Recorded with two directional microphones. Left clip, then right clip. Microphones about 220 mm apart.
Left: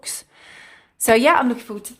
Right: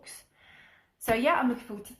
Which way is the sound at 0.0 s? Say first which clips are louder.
Left 16 dB; 50° left (ahead or behind).